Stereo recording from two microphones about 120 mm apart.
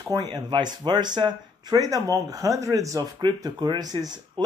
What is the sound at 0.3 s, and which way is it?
Speech, 35° right (ahead or behind).